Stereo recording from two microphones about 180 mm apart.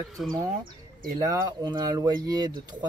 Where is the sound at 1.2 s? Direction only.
20° right (ahead or behind).